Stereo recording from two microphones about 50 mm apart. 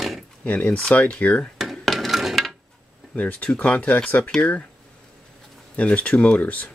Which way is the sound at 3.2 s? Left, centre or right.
Left.